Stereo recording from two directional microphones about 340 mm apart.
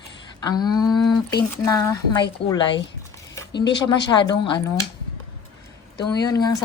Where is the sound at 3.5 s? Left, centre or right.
Left.